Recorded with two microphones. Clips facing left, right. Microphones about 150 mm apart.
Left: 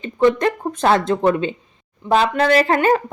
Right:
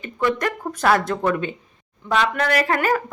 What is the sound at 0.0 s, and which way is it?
A woman's voice, 20° left (ahead or behind).